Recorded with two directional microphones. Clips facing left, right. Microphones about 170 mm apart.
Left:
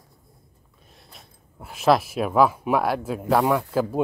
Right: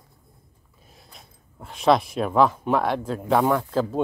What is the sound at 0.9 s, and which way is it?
Speech, 5° left (ahead or behind).